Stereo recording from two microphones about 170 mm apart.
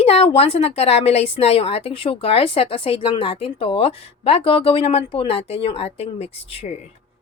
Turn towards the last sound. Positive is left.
turn(degrees=35)  # may be behind; listen again after turning